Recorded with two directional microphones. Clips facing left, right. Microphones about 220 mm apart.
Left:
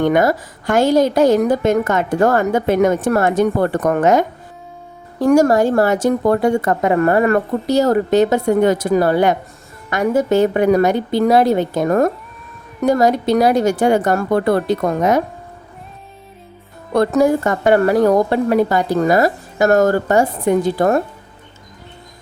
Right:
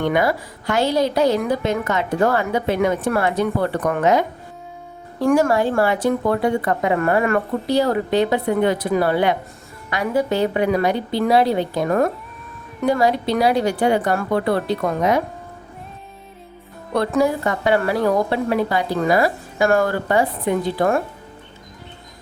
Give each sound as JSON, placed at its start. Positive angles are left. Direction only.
{"t": 0.0, "sound": "a woman's voice", "side_deg": 45}
{"t": 16.9, "sound": "a woman's voice", "side_deg": 45}